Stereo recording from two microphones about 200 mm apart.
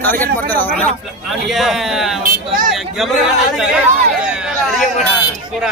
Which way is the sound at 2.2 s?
45° right (ahead or behind).